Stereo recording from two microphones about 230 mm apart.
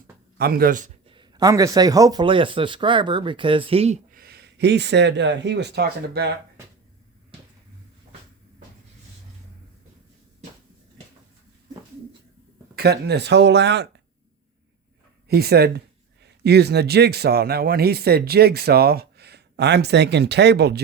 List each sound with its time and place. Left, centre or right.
0.3 s speech: right
1.0 s speech: right
12.7 s a man's voice: right
15.3 s a man's voice: right